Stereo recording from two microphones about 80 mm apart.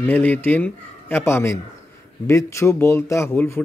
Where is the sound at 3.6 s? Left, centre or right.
Centre.